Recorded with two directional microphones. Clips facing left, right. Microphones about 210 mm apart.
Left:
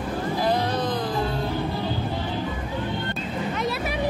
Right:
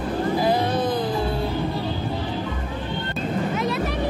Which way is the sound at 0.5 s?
5° right (ahead or behind).